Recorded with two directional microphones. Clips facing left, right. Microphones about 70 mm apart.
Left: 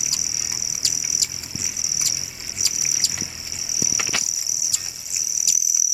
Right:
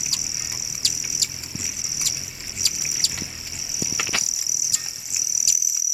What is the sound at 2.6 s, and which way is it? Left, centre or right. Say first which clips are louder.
Bird: even; centre.